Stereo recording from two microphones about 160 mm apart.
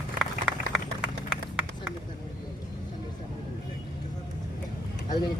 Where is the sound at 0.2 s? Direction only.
Centre (ahead or behind).